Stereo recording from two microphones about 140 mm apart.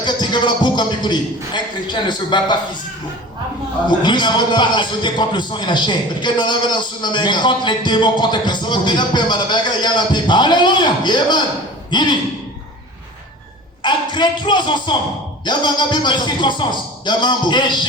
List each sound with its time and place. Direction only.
0.0 s a man's voice: 30° left (ahead or behind)
3.8 s a man's voice: 35° left (ahead or behind)
13.8 s a man's voice: 35° left (ahead or behind)